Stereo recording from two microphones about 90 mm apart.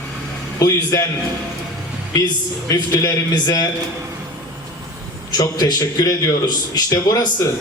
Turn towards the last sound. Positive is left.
turn(degrees=45)  # may be behind; listen again after turning